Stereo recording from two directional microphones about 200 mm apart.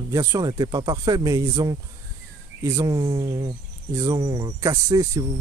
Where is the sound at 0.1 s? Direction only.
15° right (ahead or behind).